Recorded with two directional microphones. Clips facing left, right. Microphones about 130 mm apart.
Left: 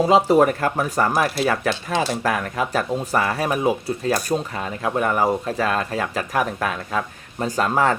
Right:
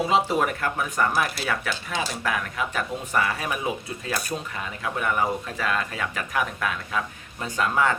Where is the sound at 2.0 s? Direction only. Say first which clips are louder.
Left 5 dB; 45° left (ahead or behind).